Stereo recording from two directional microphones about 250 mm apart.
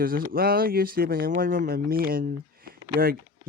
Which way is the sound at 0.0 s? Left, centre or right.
Right.